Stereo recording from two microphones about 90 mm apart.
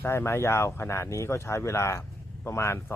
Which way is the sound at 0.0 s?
25° left (ahead or behind).